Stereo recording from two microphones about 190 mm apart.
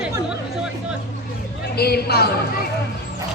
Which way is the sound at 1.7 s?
55° left (ahead or behind).